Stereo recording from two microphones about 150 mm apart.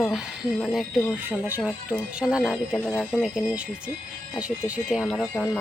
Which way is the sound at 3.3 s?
5° right (ahead or behind).